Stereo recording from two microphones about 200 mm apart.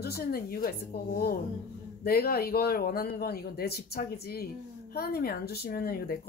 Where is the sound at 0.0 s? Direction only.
50° left (ahead or behind).